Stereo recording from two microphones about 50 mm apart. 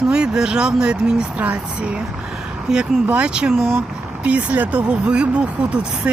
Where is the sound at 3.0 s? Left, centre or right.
Right.